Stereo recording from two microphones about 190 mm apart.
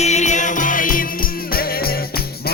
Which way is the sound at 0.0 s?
35° left (ahead or behind).